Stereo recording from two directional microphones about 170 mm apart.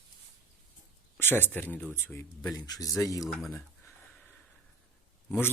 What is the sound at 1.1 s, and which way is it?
Speech, 10° left (ahead or behind).